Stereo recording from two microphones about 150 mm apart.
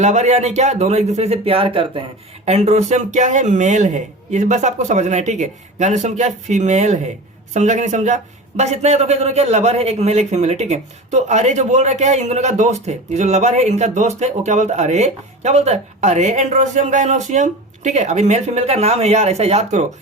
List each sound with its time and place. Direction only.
0.0 s a man's voice: 50° right (ahead or behind)
2.5 s a man's voice: 45° right (ahead or behind)